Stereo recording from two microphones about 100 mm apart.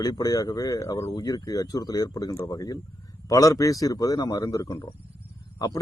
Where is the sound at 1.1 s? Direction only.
40° left (ahead or behind).